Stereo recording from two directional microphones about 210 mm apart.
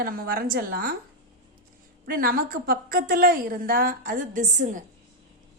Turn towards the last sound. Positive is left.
turn(degrees=-35)  # may be behind; listen again after turning